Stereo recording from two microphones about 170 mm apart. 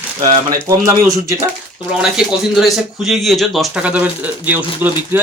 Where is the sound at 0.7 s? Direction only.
20° right (ahead or behind).